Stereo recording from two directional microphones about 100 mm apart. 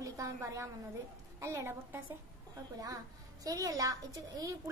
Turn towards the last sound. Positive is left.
turn(degrees=-35)  # may be behind; listen again after turning